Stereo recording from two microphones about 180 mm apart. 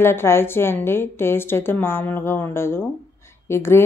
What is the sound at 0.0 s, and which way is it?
A woman's voice, 15° left (ahead or behind).